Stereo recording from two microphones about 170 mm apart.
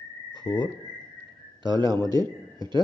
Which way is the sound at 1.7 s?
25° right (ahead or behind).